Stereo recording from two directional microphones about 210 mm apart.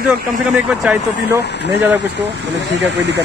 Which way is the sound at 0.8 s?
10° right (ahead or behind).